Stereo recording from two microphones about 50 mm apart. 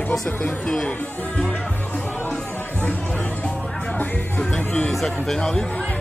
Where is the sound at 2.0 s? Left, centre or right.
Left.